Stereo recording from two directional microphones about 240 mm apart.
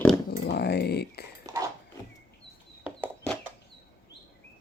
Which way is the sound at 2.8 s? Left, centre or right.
Centre.